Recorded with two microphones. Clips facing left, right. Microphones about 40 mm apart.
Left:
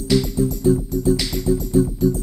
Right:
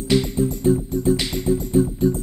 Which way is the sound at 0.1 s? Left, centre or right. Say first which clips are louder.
Left 1 dB; right.